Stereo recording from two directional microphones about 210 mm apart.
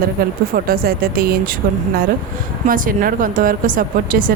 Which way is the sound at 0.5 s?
45° right (ahead or behind).